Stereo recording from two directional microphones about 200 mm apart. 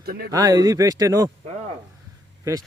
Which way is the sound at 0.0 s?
50° right (ahead or behind).